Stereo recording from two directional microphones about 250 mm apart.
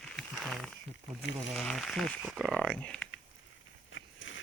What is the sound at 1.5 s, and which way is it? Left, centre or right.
Speech, centre.